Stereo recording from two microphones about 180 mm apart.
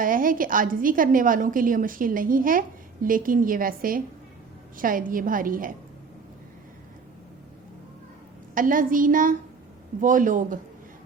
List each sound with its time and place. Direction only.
0.0 s a woman's voice: 50° right (ahead or behind)
8.5 s a woman's voice: 50° right (ahead or behind)